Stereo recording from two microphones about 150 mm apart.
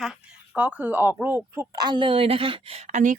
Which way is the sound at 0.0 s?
5° right (ahead or behind).